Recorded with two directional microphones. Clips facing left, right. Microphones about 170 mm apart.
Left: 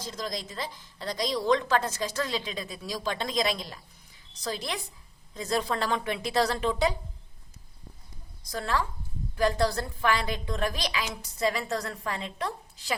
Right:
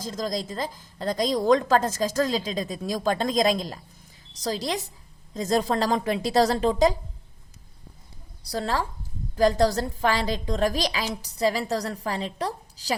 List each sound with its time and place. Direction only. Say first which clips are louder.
0.0 s a woman's voice: right 6 dB; 45° right (ahead or behind)
8.4 s a woman's voice: right 3 dB; 35° right (ahead or behind)